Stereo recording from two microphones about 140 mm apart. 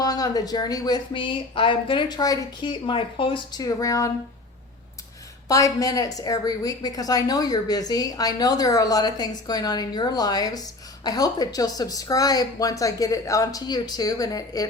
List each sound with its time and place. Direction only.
0.0 s a woman's voice: 25° left (ahead or behind)
5.5 s a woman's voice: 25° left (ahead or behind)